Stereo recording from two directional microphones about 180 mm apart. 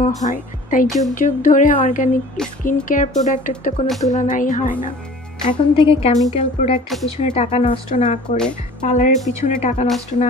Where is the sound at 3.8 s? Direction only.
Centre (ahead or behind).